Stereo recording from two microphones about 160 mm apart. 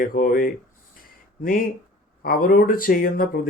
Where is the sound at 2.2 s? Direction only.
60° left (ahead or behind).